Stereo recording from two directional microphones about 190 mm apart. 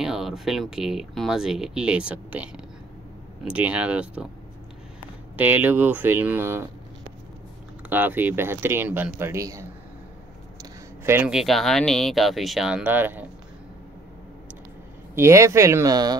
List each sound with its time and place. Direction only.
0.0 s speech: centre (ahead or behind)
5.3 s speech: 10° right (ahead or behind)
7.9 s speech: 10° right (ahead or behind)
15.1 s speech: 15° right (ahead or behind)